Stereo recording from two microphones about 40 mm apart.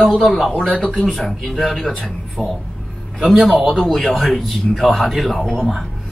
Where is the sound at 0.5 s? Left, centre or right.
Left; by 1.9 s centre.